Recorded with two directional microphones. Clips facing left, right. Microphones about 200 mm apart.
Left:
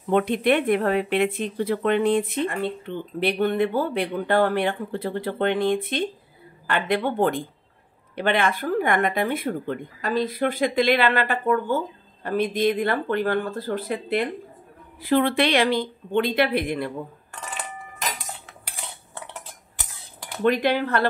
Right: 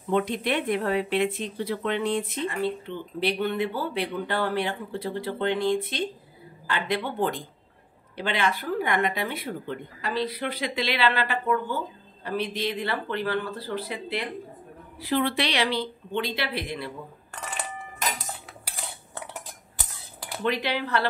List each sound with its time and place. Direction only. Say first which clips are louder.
0.1 s speech: left 5 dB; 60° left (ahead or behind)
20.4 s speech: left 7 dB; 50° left (ahead or behind)